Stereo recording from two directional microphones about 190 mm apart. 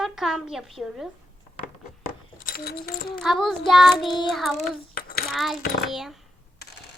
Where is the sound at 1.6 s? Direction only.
45° left (ahead or behind).